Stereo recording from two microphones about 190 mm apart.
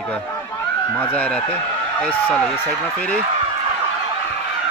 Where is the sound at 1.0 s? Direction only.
10° left (ahead or behind).